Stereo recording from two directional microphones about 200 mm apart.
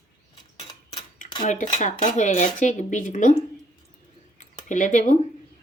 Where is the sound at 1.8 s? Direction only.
40° left (ahead or behind).